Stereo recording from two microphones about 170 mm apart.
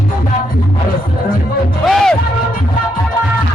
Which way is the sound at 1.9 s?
Centre (ahead or behind).